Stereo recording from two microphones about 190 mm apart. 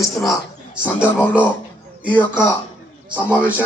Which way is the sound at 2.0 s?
10° right (ahead or behind).